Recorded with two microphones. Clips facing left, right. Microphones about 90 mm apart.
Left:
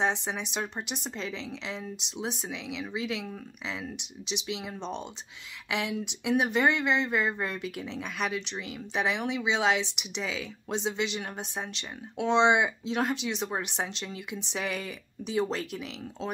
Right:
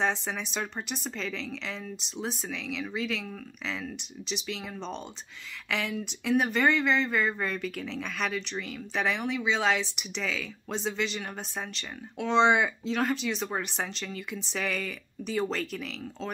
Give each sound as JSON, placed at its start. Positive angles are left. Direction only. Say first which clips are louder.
{"t": 0.0, "sound": "speech", "louder": "even", "side_deg": 20}